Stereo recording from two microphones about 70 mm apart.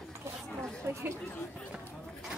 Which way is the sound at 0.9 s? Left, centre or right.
Right.